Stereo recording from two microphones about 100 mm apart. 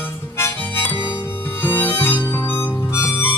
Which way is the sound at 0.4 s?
20° left (ahead or behind).